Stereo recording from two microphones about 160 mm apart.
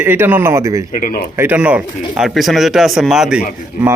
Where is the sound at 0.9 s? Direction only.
60° left (ahead or behind).